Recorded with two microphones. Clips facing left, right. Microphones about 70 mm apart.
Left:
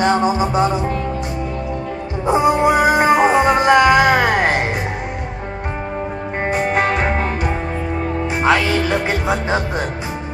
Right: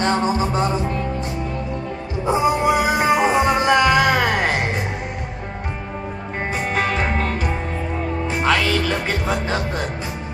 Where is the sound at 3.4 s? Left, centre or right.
Centre.